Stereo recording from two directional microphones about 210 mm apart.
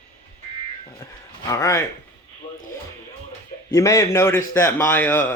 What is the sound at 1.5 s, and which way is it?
Speech, 15° left (ahead or behind).